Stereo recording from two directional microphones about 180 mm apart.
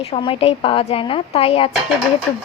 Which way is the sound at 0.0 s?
30° left (ahead or behind).